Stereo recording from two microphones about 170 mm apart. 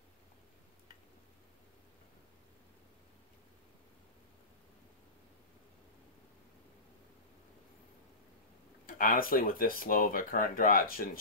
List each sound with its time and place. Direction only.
8.8 s speech: 55° left (ahead or behind)